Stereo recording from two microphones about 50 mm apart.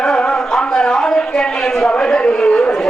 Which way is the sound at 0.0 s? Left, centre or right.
Centre.